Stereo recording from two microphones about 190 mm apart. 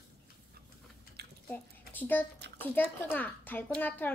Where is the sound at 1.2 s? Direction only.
55° right (ahead or behind).